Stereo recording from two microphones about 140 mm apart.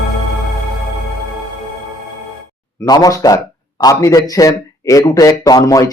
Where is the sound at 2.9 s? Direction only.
25° left (ahead or behind).